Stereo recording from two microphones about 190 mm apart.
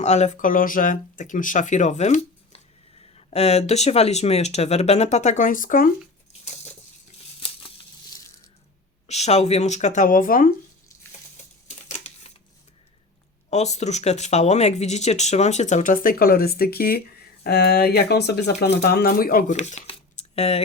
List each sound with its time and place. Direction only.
0.0 s speech: 35° left (ahead or behind)
7.3 s tearing: 30° left (ahead or behind)
9.0 s speech: 35° left (ahead or behind)
11.9 s a sound: 35° left (ahead or behind)
13.5 s speech: 35° left (ahead or behind)